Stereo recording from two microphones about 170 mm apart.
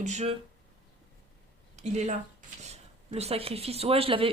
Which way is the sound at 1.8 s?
45° right (ahead or behind).